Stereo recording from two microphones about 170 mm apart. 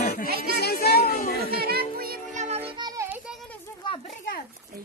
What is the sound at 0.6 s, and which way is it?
Child singing, 70° left (ahead or behind).